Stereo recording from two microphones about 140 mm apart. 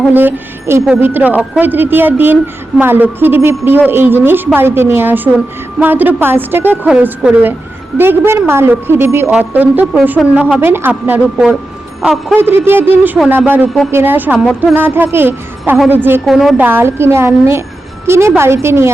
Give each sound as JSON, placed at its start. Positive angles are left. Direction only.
{"t": 0.1, "sound": "a woman's voice", "side_deg": -15}
{"t": 12.4, "sound": "speech", "side_deg": -15}
{"t": 16.2, "sound": "a woman's voice", "side_deg": 0}
{"t": 16.6, "sound": "a woman's voice", "side_deg": -15}